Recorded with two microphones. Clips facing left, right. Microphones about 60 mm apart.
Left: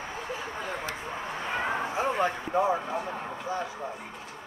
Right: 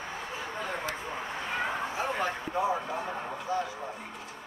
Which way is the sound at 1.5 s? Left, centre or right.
Left.